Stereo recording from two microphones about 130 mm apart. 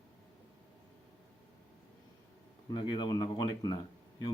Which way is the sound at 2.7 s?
35° left (ahead or behind).